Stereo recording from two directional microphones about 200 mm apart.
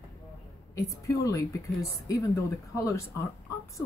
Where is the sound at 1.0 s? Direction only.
15° left (ahead or behind).